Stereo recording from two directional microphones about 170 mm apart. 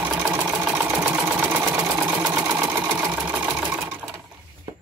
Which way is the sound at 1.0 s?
5° right (ahead or behind).